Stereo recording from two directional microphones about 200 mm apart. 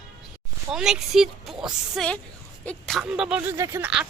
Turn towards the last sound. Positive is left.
turn(degrees=-15)  # may be behind; listen again after turning